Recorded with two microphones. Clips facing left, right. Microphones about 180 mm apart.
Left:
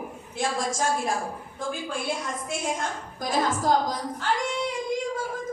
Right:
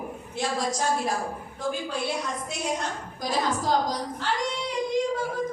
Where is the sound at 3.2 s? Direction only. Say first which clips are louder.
Left 2 dB; 50° left (ahead or behind).